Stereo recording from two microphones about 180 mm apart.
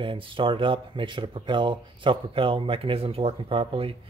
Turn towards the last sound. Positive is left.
turn(degrees=-30)  # may be behind; listen again after turning